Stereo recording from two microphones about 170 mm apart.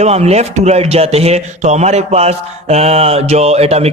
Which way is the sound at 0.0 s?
40° right (ahead or behind).